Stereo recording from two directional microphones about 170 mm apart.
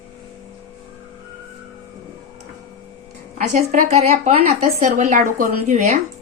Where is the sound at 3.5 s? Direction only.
40° right (ahead or behind).